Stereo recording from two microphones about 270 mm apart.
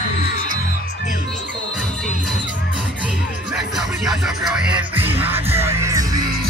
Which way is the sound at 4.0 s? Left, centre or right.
Centre.